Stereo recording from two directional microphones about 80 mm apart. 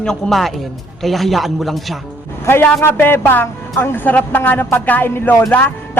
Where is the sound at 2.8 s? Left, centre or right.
Left.